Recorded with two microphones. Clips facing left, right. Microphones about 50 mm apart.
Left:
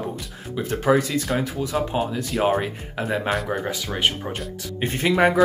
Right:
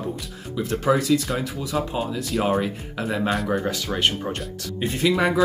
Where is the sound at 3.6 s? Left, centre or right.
Centre.